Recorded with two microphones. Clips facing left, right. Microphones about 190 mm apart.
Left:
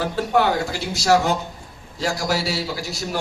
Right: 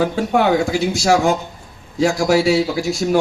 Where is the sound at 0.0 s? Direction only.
50° right (ahead or behind).